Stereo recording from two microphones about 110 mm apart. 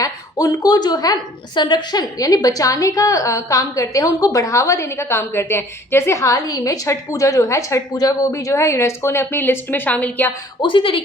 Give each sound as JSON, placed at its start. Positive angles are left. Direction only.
{"t": 0.0, "sound": "a woman's voice", "side_deg": 35}
{"t": 10.6, "sound": "speech", "side_deg": 50}